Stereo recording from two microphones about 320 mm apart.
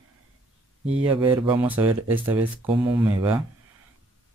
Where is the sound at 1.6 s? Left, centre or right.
Centre.